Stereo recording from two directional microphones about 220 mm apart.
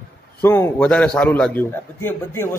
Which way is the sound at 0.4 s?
10° left (ahead or behind).